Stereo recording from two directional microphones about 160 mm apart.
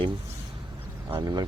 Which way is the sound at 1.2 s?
25° right (ahead or behind).